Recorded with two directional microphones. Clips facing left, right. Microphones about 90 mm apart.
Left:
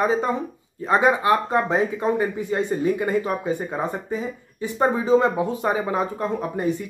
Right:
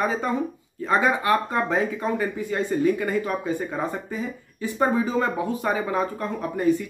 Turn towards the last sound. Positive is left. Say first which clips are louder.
# even
turn(degrees=20)  # may be behind; listen again after turning